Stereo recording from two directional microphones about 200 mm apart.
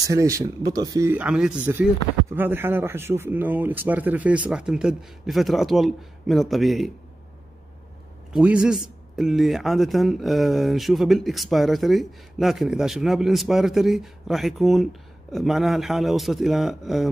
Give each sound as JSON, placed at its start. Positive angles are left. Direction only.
{"t": 0.0, "sound": "speech", "side_deg": -15}
{"t": 8.3, "sound": "a man's voice", "side_deg": -5}